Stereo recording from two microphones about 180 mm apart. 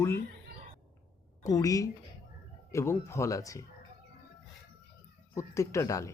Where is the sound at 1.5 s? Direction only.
20° left (ahead or behind).